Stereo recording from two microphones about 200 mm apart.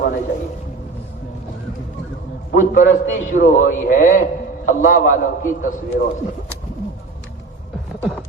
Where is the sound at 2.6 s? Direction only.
40° left (ahead or behind).